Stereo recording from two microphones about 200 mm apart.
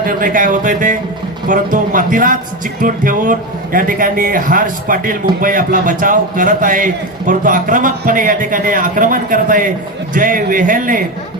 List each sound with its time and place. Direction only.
0.0 s a man's voice: 45° right (ahead or behind)